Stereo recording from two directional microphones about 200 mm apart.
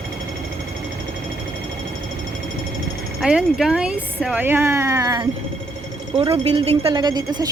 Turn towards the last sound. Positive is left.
turn(degrees=-20)  # may be behind; listen again after turning